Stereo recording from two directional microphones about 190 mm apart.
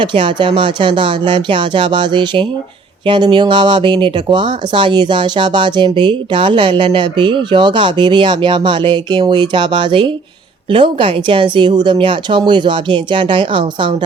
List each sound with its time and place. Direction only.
0.0 s speech: 25° right (ahead or behind)